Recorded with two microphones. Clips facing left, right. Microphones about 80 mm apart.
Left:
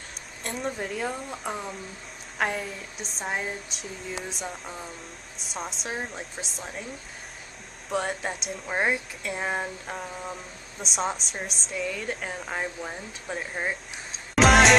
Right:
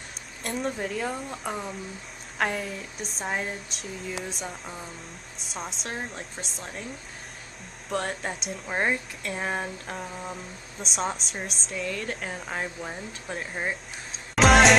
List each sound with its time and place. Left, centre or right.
0.4 s speech: centre
7.9 s speech: centre